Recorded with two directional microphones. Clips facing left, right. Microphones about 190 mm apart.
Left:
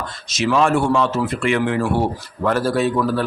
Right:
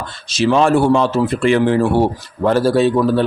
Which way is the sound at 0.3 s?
30° right (ahead or behind).